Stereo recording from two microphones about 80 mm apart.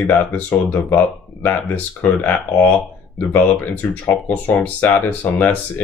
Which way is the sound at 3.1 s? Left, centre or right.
Left.